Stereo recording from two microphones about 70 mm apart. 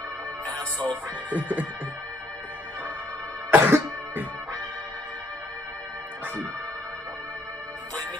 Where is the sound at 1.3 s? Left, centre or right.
Right.